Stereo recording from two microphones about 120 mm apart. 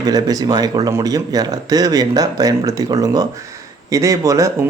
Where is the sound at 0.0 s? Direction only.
35° right (ahead or behind).